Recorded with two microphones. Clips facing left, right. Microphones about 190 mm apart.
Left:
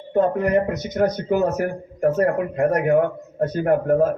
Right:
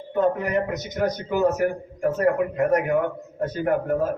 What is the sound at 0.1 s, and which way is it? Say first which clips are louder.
A man's voice: left 4 dB; 45° left (ahead or behind).